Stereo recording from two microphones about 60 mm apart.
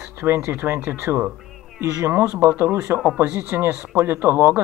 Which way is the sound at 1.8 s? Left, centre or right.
Right.